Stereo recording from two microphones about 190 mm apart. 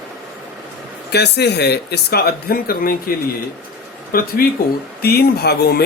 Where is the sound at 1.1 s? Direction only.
60° left (ahead or behind).